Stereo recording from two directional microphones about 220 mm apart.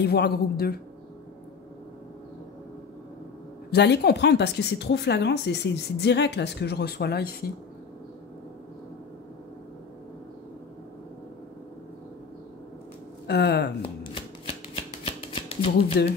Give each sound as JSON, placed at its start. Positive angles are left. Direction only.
{"t": 0.0, "sound": "speech", "side_deg": 45}
{"t": 3.7, "sound": "speech", "side_deg": 50}
{"t": 13.3, "sound": "speech", "side_deg": 50}
{"t": 13.8, "sound": "shuffling cards", "side_deg": 25}
{"t": 16.0, "sound": "speech", "side_deg": 45}